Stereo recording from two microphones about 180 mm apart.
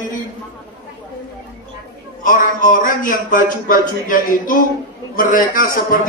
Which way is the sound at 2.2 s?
50° left (ahead or behind).